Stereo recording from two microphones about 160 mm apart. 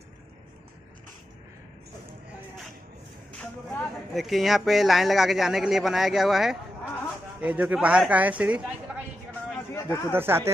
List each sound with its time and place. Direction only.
3.3 s speech: 5° left (ahead or behind)
9.8 s speech: 15° left (ahead or behind)
10.1 s speech: 15° right (ahead or behind)